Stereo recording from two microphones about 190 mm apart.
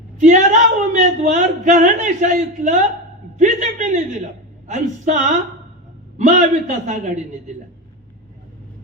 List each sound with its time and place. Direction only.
0.2 s speech: 40° right (ahead or behind)
3.3 s a sound: 40° right (ahead or behind)
4.7 s a man's voice: 40° right (ahead or behind)